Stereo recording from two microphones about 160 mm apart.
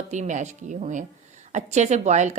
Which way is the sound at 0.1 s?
50° right (ahead or behind).